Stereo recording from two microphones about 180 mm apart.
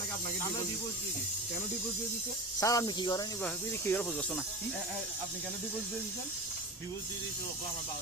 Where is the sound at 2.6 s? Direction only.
20° left (ahead or behind).